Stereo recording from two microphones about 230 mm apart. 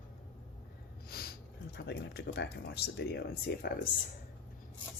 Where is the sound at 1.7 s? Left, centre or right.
Left.